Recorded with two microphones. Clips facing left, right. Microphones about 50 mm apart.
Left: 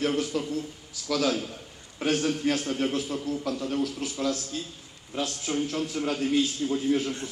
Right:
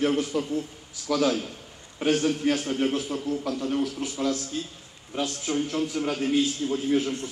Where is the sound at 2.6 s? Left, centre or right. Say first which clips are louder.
Right 2 dB; centre; by 4.4 s right.